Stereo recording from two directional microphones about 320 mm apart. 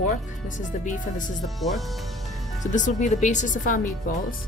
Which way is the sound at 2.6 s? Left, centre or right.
Left.